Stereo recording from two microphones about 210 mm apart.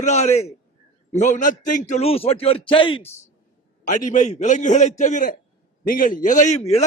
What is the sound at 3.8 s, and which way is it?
A man's voice, 35° left (ahead or behind).